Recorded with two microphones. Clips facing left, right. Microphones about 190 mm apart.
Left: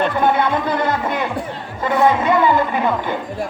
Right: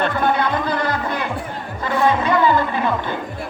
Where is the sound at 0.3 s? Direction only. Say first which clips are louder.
Left 2 dB; 25° left (ahead or behind).